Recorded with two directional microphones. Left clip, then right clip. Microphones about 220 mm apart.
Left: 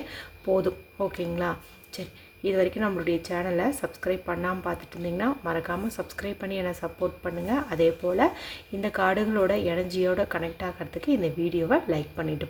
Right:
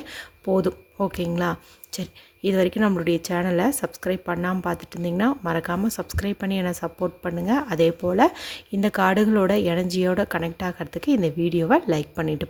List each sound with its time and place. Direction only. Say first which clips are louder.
0.1 s speech: right 2 dB; 35° right (ahead or behind)